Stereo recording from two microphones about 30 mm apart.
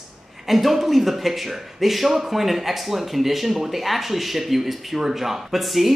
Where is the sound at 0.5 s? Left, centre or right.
Centre.